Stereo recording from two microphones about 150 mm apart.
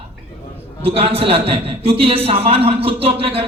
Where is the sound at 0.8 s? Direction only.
40° right (ahead or behind).